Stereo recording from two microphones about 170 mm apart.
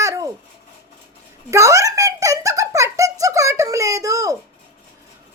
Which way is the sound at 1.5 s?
15° right (ahead or behind).